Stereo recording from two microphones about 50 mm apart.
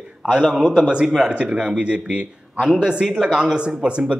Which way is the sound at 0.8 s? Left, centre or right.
Centre.